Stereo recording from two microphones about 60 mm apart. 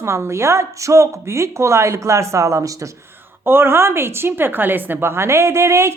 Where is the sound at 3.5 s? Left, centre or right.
Right.